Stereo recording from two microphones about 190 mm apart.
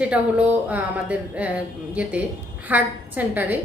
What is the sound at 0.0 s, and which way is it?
A woman's voice, 5° right (ahead or behind).